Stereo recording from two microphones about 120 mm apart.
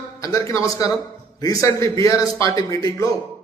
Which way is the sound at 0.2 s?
30° left (ahead or behind).